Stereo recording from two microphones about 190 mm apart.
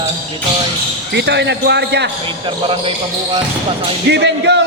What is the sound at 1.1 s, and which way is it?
Speech, 65° right (ahead or behind).